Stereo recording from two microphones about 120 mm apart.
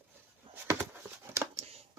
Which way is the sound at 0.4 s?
45° right (ahead or behind).